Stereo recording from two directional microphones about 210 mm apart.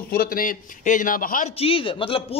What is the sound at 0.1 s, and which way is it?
Speech, 45° left (ahead or behind).